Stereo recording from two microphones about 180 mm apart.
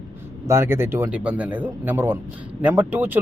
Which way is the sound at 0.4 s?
15° right (ahead or behind).